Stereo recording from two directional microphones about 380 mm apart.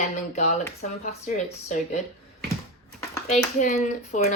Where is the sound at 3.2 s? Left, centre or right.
Centre.